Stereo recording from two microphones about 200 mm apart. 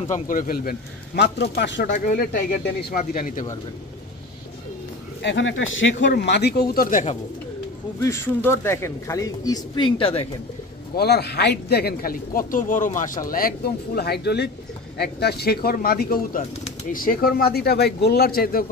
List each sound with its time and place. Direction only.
0.1 s speech: 45° left (ahead or behind)
1.9 s speech: 45° left (ahead or behind)
5.2 s speech: 65° left (ahead or behind); by 7.2 s 40° left (ahead or behind)
8.0 s speech: 15° left (ahead or behind)
11.0 s speech: 55° left (ahead or behind)